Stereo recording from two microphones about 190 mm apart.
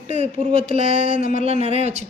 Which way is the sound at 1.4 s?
35° right (ahead or behind).